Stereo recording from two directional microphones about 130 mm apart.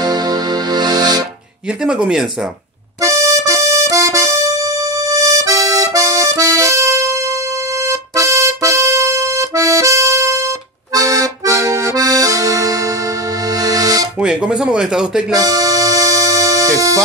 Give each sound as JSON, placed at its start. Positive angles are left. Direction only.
{"t": 0.0, "sound": "music", "side_deg": -30}
{"t": 1.9, "sound": "speech", "side_deg": -5}
{"t": 3.0, "sound": "accordion", "side_deg": -25}
{"t": 8.2, "sound": "accordion", "side_deg": -25}
{"t": 14.2, "sound": "speech", "side_deg": -5}
{"t": 15.4, "sound": "accordion", "side_deg": -25}